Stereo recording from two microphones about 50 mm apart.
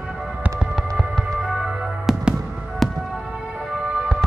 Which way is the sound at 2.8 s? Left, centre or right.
Centre.